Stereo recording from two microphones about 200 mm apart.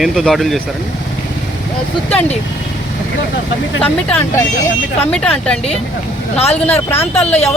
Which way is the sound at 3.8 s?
10° left (ahead or behind).